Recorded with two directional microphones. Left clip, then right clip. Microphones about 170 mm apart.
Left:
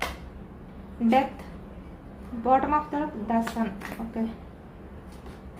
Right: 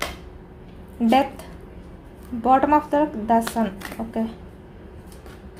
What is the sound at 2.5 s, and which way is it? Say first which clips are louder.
Speech: right 6 dB; 80° right.